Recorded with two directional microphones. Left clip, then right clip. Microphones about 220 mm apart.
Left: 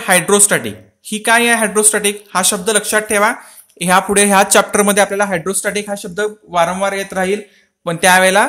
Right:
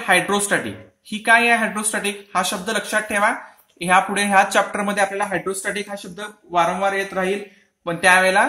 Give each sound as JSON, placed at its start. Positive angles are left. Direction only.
{"t": 0.0, "sound": "speech", "side_deg": 45}